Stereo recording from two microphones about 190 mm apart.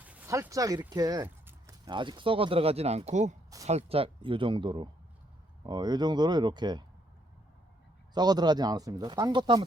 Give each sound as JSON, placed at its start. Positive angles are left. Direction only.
{"t": 0.0, "sound": "speech", "side_deg": -10}
{"t": 8.1, "sound": "speech", "side_deg": -20}